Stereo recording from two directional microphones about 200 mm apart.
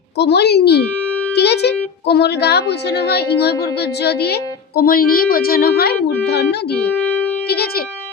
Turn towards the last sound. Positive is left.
turn(degrees=50)  # may be behind; listen again after turning